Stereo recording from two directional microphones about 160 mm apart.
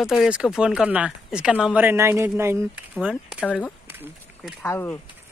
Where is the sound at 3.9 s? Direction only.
10° right (ahead or behind).